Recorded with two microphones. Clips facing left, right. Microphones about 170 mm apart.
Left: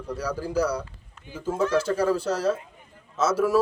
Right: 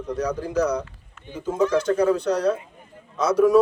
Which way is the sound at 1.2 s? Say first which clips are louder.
Right 4 dB; 35° left (ahead or behind).